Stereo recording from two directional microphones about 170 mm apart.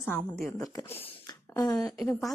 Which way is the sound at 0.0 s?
10° left (ahead or behind).